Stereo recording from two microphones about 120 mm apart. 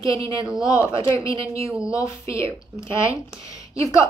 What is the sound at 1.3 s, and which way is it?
Speech, 55° right (ahead or behind).